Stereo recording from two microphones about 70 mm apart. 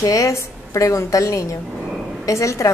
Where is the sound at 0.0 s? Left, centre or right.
Left.